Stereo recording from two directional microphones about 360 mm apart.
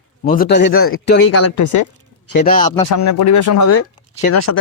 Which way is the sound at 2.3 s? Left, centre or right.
Left.